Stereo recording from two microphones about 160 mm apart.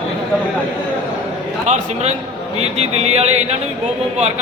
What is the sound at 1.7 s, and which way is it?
Speech, 45° right (ahead or behind).